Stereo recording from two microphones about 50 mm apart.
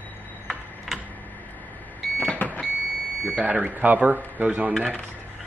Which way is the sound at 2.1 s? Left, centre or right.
Left.